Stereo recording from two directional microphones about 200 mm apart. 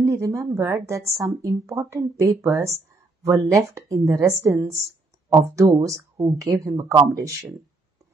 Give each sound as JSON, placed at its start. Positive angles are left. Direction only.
{"t": 0.0, "sound": "speech", "side_deg": -15}